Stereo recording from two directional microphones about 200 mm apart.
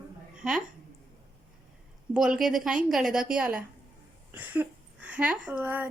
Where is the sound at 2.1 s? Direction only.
5° right (ahead or behind).